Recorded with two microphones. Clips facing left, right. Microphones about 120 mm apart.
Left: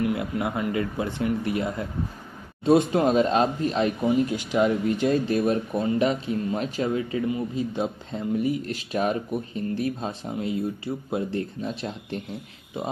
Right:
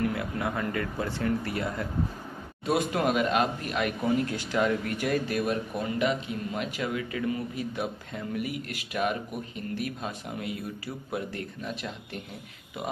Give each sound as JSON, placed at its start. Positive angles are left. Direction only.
{"t": 0.0, "sound": "speech", "side_deg": 20}